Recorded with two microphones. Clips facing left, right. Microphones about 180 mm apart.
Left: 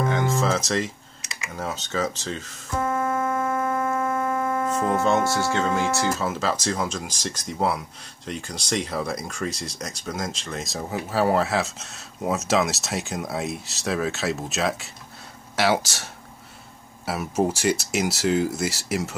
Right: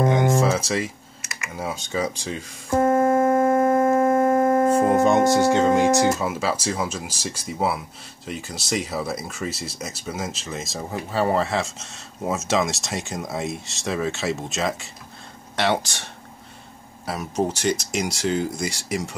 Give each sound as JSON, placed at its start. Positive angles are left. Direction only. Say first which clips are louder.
{"t": 0.0, "sound": "music", "louder": "right 4 dB", "side_deg": -20}
{"t": 1.6, "sound": "speech", "louder": "right 1 dB", "side_deg": -10}
{"t": 3.0, "sound": "a sound", "louder": "right 7 dB", "side_deg": -35}
{"t": 4.1, "sound": "shofar", "louder": "right 7 dB", "side_deg": -50}
{"t": 5.0, "sound": "speech", "louder": "right 5 dB", "side_deg": -15}